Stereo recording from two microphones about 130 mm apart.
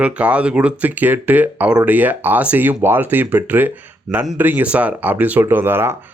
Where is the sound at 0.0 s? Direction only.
10° right (ahead or behind).